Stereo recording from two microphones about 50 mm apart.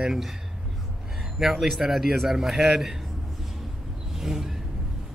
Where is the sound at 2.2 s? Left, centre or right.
Centre.